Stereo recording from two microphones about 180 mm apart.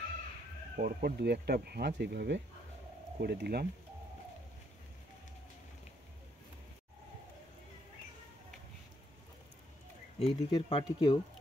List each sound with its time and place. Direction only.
0.7 s speech: 60° right (ahead or behind); by 2.4 s 75° right (ahead or behind)
3.2 s speech: 60° right (ahead or behind)
10.1 s speech: 30° left (ahead or behind)